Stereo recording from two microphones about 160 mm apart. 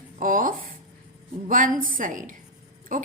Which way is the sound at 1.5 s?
55° right (ahead or behind).